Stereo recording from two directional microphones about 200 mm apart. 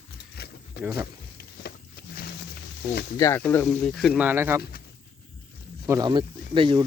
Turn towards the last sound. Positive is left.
turn(degrees=-25)  # may be behind; listen again after turning